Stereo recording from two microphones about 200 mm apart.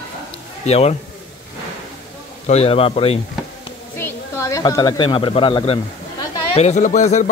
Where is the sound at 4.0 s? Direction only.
15° left (ahead or behind); by 7.2 s 35° left (ahead or behind).